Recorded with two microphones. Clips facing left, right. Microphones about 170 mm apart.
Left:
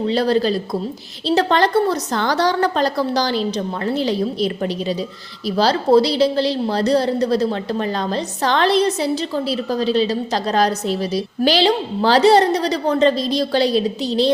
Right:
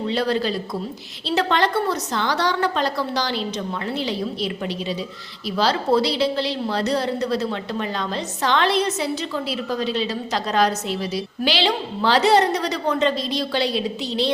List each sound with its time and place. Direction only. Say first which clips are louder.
0.1 s a woman's voice: left 5 dB; 35° left (ahead or behind)